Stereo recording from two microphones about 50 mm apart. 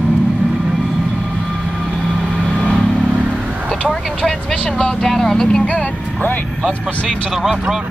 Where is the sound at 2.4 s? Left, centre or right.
Centre.